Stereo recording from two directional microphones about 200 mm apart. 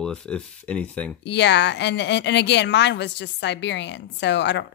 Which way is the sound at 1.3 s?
60° left (ahead or behind).